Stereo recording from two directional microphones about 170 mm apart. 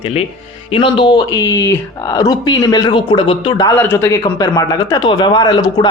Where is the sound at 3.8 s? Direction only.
10° left (ahead or behind).